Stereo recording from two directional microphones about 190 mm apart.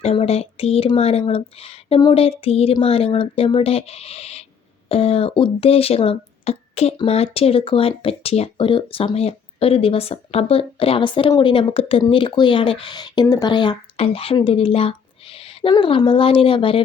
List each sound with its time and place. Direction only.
0.0 s speech: 30° left (ahead or behind)